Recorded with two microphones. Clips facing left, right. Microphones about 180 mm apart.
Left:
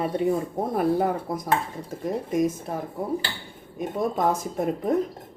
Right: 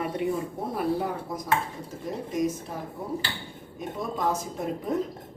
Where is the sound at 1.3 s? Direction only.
55° left (ahead or behind).